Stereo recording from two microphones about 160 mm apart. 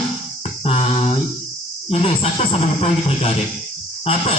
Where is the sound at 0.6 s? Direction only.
40° left (ahead or behind).